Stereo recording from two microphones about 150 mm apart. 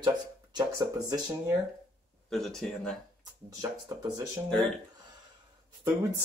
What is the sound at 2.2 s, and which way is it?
Speech, 5° left (ahead or behind).